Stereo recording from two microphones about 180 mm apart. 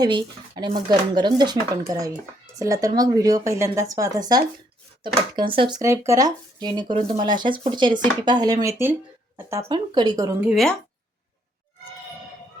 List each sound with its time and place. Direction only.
0.0 s speech: 25° right (ahead or behind)
10.4 s speech: centre (ahead or behind)